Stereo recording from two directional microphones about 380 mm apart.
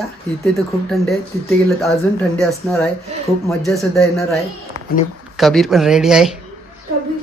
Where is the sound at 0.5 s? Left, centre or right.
Centre.